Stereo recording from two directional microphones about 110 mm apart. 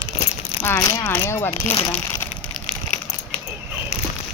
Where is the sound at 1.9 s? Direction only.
20° left (ahead or behind).